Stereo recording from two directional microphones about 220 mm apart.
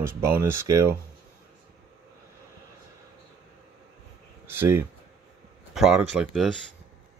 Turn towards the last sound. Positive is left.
turn(degrees=0)  # may be behind; listen again after turning